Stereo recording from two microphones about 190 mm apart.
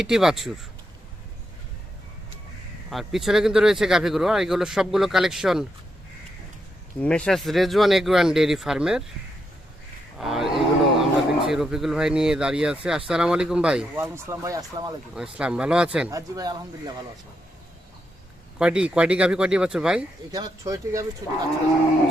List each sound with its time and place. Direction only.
0.0 s speech: centre (ahead or behind)
2.9 s speech: centre (ahead or behind)
7.0 s speech: 5° left (ahead or behind)
10.2 s speech: centre (ahead or behind); by 14.9 s 20° right (ahead or behind)
15.1 s speech: 5° right (ahead or behind)
16.1 s speech: 20° right (ahead or behind)
18.6 s speech: 5° right (ahead or behind)
20.3 s speech: 20° right (ahead or behind)